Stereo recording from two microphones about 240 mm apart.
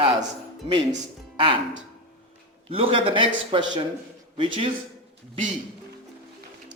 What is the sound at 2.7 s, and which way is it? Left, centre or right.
A man's voice, right.